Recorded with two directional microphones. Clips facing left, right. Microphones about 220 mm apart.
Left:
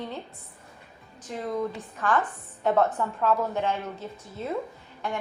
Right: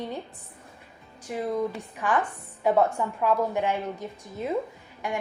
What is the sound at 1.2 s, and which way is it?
A woman's voice, 10° right (ahead or behind).